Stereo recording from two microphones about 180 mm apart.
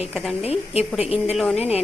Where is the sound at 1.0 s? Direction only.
35° left (ahead or behind).